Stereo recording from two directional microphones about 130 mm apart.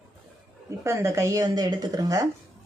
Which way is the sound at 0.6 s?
20° right (ahead or behind).